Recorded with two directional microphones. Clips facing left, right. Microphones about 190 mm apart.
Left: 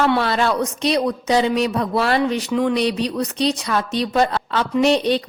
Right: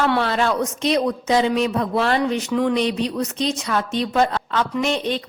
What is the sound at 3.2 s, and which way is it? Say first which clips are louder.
Speech: left 2 dB; 35° left (ahead or behind).